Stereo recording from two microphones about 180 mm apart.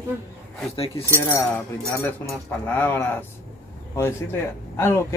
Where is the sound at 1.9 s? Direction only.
15° left (ahead or behind).